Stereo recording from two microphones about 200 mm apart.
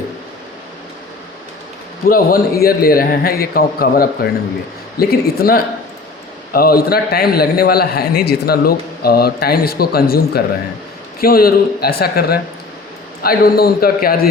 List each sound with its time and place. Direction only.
2.0 s a man's voice: 45° left (ahead or behind)